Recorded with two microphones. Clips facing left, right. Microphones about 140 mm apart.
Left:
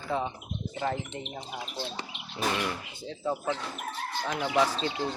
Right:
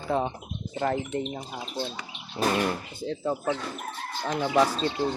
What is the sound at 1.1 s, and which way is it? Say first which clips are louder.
Speech: right 7 dB; 40° right (ahead or behind).